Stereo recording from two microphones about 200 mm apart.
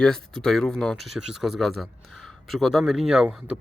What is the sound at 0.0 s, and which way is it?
Speech, 5° left (ahead or behind).